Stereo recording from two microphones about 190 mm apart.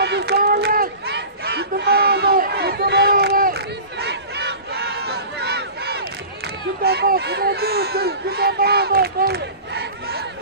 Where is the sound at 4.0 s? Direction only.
60° right (ahead or behind).